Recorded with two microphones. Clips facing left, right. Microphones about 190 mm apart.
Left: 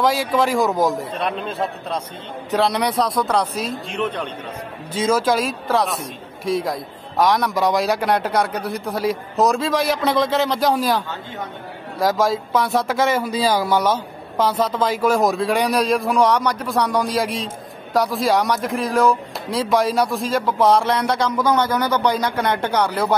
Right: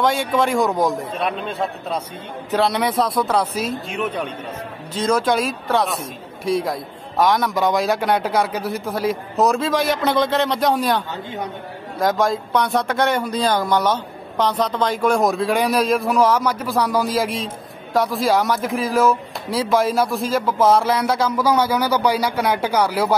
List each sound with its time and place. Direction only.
0.0 s speech: centre (ahead or behind)
4.9 s speech: 5° left (ahead or behind)